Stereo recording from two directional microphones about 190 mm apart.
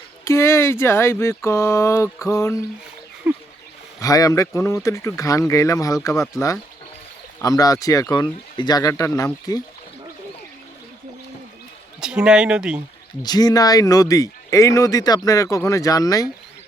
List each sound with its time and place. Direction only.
0.3 s speech: 15° left (ahead or behind)
3.3 s speech: 5° right (ahead or behind)
4.0 s speech: 20° left (ahead or behind)
11.9 s speech: 5° right (ahead or behind)
13.2 s speech: 20° left (ahead or behind)